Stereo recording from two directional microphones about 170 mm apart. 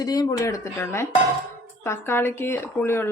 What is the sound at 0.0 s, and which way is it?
Speech, 20° left (ahead or behind).